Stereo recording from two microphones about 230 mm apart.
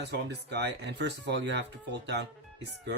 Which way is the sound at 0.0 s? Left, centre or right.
Right.